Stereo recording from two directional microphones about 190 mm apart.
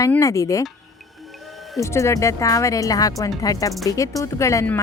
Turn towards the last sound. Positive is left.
turn(degrees=15)  # may be behind; listen again after turning